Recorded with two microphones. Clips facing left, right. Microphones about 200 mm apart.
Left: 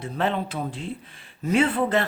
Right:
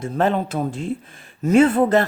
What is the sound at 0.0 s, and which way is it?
Speech, 45° right (ahead or behind).